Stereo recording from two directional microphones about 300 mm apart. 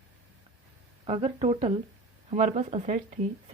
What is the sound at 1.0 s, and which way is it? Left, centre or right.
Speech, centre.